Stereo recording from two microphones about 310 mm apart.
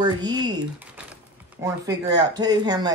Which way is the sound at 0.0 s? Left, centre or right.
Centre.